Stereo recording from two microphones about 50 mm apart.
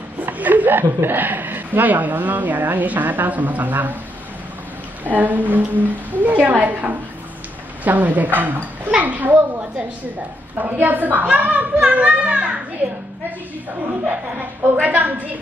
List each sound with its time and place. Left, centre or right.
0.2 s a woman's voice: right
5.0 s a woman's voice: right
14.0 s a woman's voice: right